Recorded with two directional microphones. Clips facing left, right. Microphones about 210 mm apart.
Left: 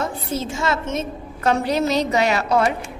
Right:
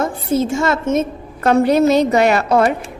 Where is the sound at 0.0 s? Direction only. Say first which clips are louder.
Right 7 dB; 50° right (ahead or behind).